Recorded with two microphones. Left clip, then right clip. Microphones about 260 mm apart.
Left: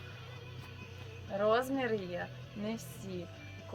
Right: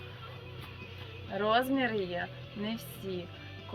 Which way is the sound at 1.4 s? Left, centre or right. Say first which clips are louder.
Right 2 dB; centre.